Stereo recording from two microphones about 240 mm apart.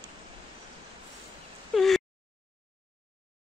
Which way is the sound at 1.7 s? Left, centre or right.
Centre.